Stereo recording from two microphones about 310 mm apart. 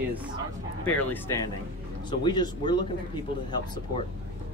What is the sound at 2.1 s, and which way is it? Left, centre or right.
Speech, centre.